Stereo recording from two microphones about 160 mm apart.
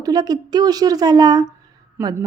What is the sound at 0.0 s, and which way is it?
Speech, 25° right (ahead or behind).